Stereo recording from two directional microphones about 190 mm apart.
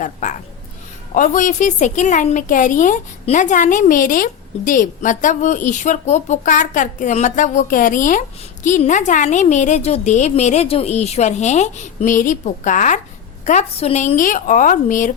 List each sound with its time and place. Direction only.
0.0 s a woman's voice: 40° left (ahead or behind)